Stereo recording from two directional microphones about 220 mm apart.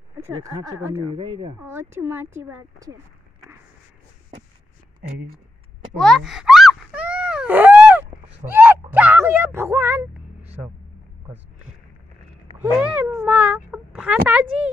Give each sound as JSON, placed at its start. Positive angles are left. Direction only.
{"t": 0.4, "sound": "speech", "side_deg": -15}
{"t": 1.1, "sound": "speech", "side_deg": -25}
{"t": 1.6, "sound": "speech", "side_deg": -10}
{"t": 5.9, "sound": "a sound", "side_deg": 0}
{"t": 8.5, "sound": "speech", "side_deg": -10}
{"t": 12.5, "sound": "a sound", "side_deg": -5}